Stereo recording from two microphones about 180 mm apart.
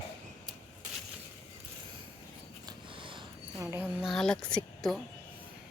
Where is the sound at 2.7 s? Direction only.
30° right (ahead or behind).